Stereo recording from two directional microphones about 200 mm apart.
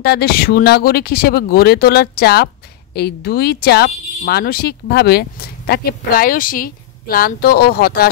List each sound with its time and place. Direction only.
0.0 s speech: 50° left (ahead or behind)